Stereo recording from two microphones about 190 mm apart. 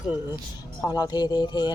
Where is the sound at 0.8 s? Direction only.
20° left (ahead or behind).